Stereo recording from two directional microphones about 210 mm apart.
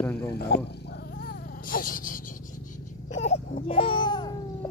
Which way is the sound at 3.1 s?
30° left (ahead or behind).